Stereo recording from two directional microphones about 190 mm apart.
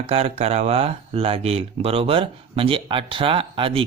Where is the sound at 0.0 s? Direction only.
30° right (ahead or behind).